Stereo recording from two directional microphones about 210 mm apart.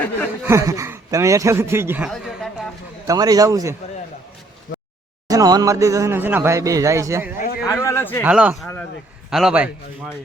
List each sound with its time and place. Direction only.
0.4 s a man's voice: 15° right (ahead or behind)
2.0 s a sound: centre (ahead or behind)
3.1 s a man's voice: 15° right (ahead or behind)
5.3 s a man's voice: 15° right (ahead or behind)
7.3 s a sound: 40° left (ahead or behind)
7.7 s speech: 15° left (ahead or behind)
8.2 s a man's voice: 5° right (ahead or behind)